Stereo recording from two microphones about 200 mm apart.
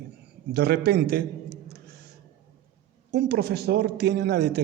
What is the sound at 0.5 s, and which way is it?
A man's voice, 55° right (ahead or behind).